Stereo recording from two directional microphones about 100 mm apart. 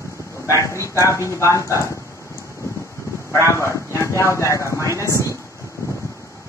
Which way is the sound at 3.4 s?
30° left (ahead or behind).